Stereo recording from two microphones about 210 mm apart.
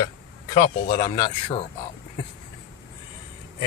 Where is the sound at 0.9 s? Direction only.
35° left (ahead or behind).